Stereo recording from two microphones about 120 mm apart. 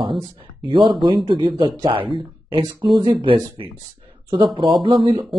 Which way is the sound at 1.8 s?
50° right (ahead or behind).